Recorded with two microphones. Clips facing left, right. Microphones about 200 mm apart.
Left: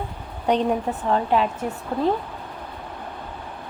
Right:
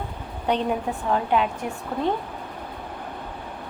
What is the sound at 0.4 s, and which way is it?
Speech, 35° left (ahead or behind).